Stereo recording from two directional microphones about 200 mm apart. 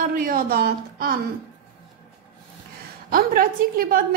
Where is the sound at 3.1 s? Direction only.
45° right (ahead or behind).